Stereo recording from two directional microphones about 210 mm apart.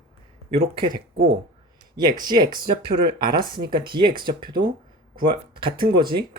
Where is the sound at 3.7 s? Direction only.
20° right (ahead or behind).